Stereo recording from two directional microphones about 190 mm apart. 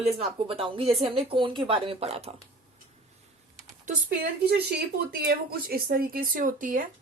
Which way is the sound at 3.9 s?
55° right (ahead or behind).